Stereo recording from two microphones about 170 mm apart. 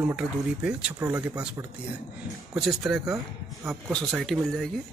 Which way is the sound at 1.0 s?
15° right (ahead or behind).